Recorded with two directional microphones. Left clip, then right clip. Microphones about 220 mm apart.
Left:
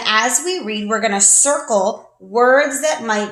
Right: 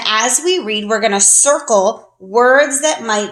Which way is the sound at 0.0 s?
40° right (ahead or behind).